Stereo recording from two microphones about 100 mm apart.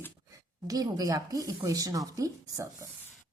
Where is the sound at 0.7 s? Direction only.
40° right (ahead or behind).